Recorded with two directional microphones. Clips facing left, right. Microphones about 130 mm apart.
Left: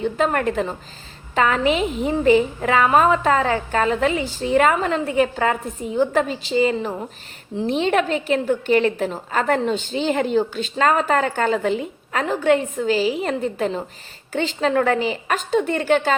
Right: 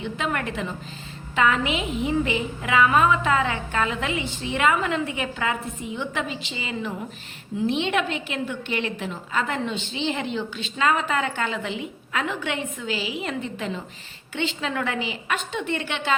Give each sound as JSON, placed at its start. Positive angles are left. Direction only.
{"t": 0.0, "sound": "a woman's voice", "side_deg": 40}